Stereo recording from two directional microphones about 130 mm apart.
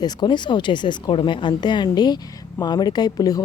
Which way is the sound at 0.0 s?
35° left (ahead or behind).